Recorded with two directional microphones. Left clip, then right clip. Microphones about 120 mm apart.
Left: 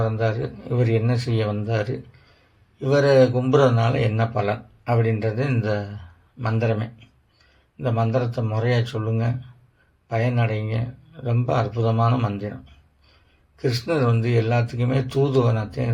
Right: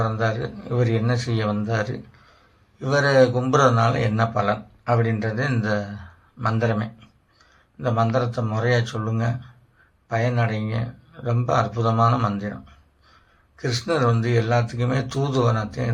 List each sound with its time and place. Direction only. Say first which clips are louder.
0.0 s speech: even; 30° left (ahead or behind)
13.6 s speech: even; 25° left (ahead or behind)